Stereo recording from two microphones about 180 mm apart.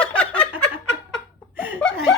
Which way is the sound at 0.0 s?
5° left (ahead or behind).